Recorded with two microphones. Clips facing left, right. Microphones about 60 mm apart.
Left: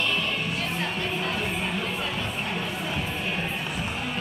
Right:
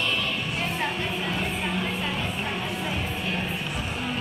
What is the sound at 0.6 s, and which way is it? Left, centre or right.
Music, right.